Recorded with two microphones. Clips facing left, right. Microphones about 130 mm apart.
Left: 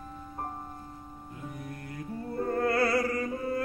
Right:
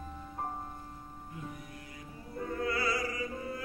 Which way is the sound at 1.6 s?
55° left (ahead or behind).